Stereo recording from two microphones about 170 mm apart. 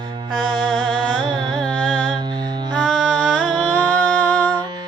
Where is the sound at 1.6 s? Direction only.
5° left (ahead or behind).